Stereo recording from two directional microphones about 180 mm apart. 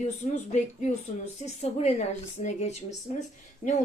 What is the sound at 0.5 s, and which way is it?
Speech, 40° left (ahead or behind).